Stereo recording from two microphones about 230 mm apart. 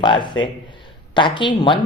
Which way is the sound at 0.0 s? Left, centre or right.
Centre.